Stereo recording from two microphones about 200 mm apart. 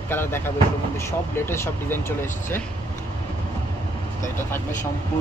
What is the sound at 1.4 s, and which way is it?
Speech, 10° left (ahead or behind).